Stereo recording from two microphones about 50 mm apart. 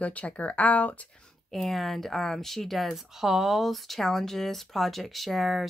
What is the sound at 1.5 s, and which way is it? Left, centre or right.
Speech, centre.